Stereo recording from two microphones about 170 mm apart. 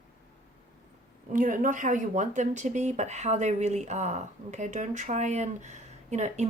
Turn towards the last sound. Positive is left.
turn(degrees=-45)  # may be behind; listen again after turning